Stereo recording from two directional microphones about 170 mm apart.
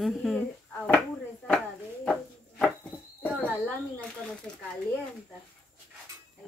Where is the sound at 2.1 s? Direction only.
Centre (ahead or behind).